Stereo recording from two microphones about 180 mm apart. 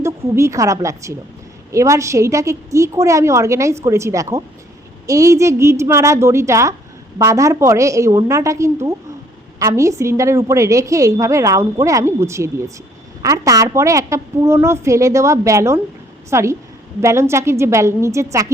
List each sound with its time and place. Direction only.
0.0 s a woman's voice: 15° right (ahead or behind)